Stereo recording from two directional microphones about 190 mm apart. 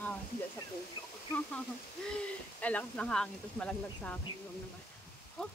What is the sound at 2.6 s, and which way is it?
Speech, 5° left (ahead or behind).